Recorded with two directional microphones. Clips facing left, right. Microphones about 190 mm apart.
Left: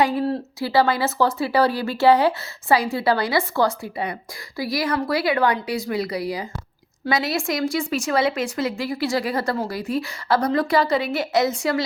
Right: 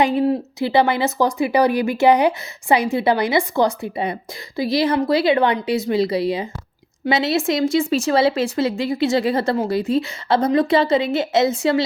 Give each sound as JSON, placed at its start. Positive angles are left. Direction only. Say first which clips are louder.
{"t": 0.0, "sound": "speech", "louder": "right 3 dB", "side_deg": -20}